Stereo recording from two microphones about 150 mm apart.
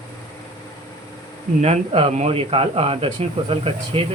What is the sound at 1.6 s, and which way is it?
Speech, 45° right (ahead or behind).